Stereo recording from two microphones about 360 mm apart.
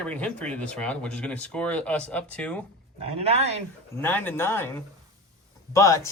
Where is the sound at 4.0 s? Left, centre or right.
Centre.